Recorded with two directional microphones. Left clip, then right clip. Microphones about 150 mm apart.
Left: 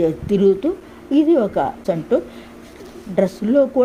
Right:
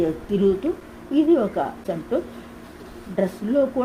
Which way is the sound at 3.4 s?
45° left (ahead or behind).